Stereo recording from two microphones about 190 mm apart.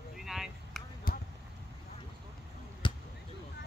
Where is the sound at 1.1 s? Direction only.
50° left (ahead or behind).